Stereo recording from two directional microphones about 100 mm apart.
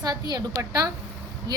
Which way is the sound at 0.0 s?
40° right (ahead or behind).